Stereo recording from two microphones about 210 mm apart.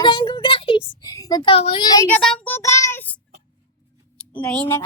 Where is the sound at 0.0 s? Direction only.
25° left (ahead or behind).